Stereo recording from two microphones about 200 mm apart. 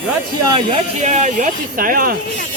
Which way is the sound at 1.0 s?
35° right (ahead or behind).